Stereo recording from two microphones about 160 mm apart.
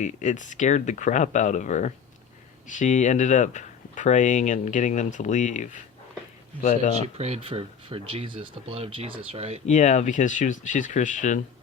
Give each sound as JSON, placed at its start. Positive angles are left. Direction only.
{"t": 0.0, "sound": "speech", "side_deg": 50}
{"t": 7.2, "sound": "speech", "side_deg": -40}
{"t": 9.6, "sound": "speech", "side_deg": 45}